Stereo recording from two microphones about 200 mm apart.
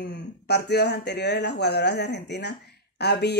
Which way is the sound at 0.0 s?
55° left (ahead or behind).